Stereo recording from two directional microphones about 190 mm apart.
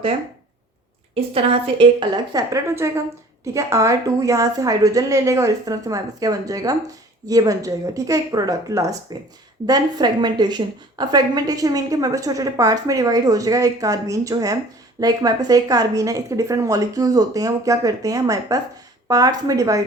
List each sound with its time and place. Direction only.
1.1 s a woman's voice: 30° right (ahead or behind)